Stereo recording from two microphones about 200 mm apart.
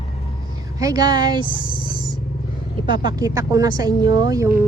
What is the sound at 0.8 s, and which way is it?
Speech, 15° right (ahead or behind).